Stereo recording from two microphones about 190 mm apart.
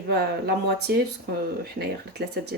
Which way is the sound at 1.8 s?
60° right (ahead or behind).